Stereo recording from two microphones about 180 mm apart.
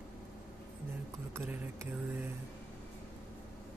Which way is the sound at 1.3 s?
15° right (ahead or behind).